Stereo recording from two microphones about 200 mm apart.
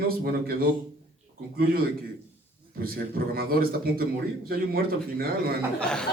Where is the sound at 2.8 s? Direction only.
50° right (ahead or behind).